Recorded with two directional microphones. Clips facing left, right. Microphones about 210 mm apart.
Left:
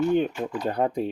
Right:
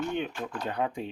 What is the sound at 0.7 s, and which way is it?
Speech, 40° left (ahead or behind).